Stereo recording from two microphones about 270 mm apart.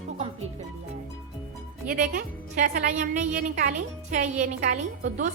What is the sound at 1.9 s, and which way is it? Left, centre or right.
A woman's voice, right.